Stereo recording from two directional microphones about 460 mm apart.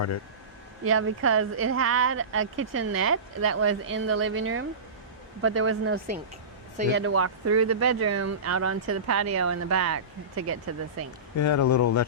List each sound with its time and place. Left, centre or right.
0.9 s speech: right
11.3 s speech: left